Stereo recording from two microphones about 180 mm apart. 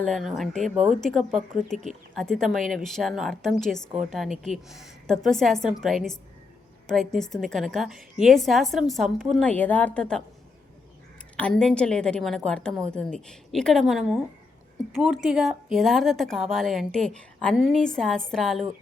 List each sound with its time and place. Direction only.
0.0 s a woman's voice: centre (ahead or behind)
11.3 s a woman's voice: 5° left (ahead or behind)